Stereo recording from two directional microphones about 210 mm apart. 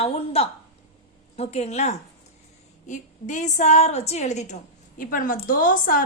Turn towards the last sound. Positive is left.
turn(degrees=40)  # may be behind; listen again after turning